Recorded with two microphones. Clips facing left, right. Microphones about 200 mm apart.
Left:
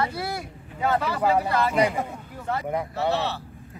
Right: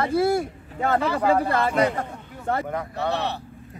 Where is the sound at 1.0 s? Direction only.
10° left (ahead or behind).